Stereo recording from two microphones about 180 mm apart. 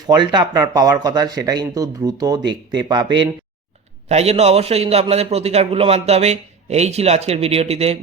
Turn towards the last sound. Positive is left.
turn(degrees=-35)  # may be behind; listen again after turning